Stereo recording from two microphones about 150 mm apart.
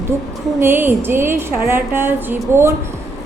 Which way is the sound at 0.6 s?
15° right (ahead or behind).